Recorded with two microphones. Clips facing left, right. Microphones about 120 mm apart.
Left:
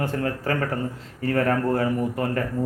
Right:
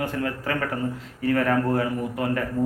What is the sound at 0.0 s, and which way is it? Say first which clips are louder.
Speech: left 1 dB; 35° left (ahead or behind).